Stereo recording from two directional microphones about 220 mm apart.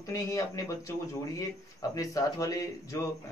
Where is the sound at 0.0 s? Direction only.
15° left (ahead or behind).